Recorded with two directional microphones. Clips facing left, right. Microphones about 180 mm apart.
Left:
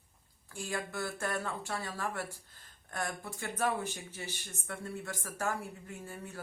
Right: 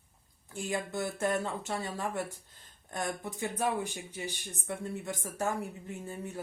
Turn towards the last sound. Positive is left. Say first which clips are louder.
# right 5 dB
turn(degrees=-20)  # may be behind; listen again after turning